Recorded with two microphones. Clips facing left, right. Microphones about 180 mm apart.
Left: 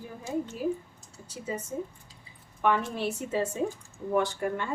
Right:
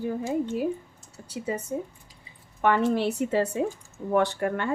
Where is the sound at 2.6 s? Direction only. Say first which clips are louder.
Right 5 dB; 70° right (ahead or behind).